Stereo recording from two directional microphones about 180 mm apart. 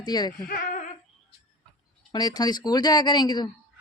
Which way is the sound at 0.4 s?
50° left (ahead or behind).